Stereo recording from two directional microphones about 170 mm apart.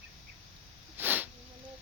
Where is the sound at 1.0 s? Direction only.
10° right (ahead or behind).